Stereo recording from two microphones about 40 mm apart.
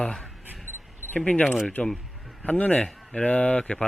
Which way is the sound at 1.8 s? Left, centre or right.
Left.